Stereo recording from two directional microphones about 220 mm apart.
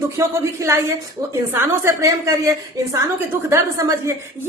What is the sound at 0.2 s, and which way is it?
A woman's voice, 15° right (ahead or behind).